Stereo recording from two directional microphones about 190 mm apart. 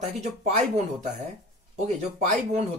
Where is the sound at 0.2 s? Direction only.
35° right (ahead or behind).